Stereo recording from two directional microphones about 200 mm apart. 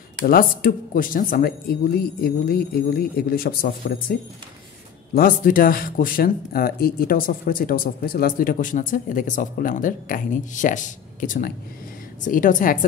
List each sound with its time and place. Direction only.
0.2 s speech: 45° left (ahead or behind)